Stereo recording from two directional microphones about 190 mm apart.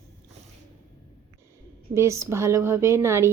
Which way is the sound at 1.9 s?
15° right (ahead or behind).